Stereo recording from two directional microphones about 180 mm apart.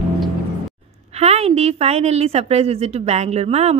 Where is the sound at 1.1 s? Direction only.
35° right (ahead or behind).